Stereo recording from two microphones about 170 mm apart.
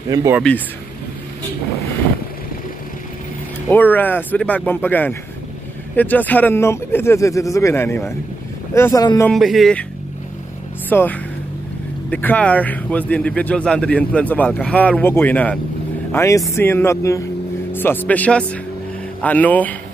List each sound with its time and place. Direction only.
0.1 s speech: 20° right (ahead or behind)
3.6 s speech: 10° left (ahead or behind)
9.3 s speech: centre (ahead or behind)
10.9 s speech: 10° left (ahead or behind)